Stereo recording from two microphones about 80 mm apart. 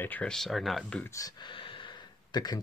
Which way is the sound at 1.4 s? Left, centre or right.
Left.